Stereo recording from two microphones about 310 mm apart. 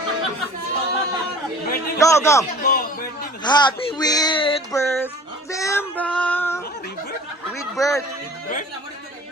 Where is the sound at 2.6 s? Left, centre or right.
Left.